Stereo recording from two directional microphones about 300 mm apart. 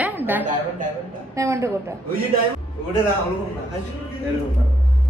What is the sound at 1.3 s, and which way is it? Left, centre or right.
Speech, centre.